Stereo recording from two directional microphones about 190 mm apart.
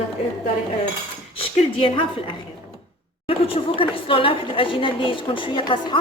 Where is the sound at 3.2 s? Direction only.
30° left (ahead or behind).